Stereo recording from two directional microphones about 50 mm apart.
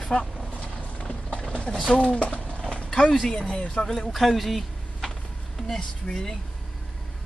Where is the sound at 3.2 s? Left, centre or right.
Centre.